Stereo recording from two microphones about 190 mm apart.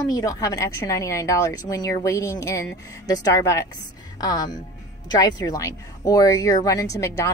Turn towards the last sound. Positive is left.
turn(degrees=15)  # may be behind; listen again after turning